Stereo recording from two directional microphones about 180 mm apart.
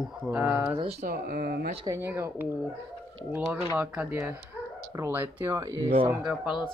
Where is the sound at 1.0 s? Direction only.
55° right (ahead or behind).